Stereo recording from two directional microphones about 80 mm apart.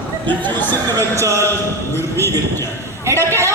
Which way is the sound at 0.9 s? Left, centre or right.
Right.